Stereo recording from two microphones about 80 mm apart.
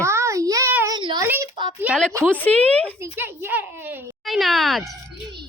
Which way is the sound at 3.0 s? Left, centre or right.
Right.